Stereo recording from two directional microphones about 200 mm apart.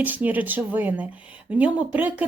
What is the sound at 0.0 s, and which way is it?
Speech, 10° right (ahead or behind).